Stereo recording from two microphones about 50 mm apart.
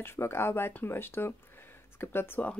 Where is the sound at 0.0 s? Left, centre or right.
Left.